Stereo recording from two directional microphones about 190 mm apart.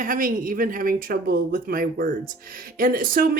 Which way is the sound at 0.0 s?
45° right (ahead or behind).